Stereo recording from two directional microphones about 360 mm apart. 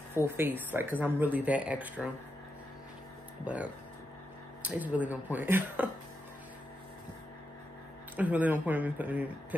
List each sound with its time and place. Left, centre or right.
0.1 s speech: centre
3.4 s speech: centre
8.2 s speech: centre